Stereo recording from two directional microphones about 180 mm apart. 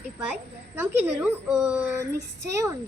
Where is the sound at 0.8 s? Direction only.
10° right (ahead or behind).